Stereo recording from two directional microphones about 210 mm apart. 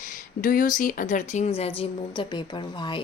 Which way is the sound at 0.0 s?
40° left (ahead or behind).